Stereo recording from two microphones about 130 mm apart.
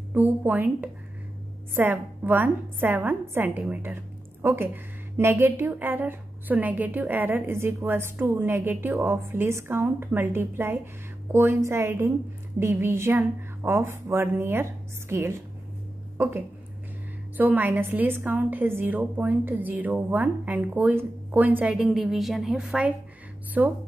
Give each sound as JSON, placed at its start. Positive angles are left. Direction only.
{"t": 0.1, "sound": "a woman's voice", "side_deg": -10}
{"t": 17.4, "sound": "a woman's voice", "side_deg": -15}
{"t": 21.7, "sound": "a woman's voice", "side_deg": 0}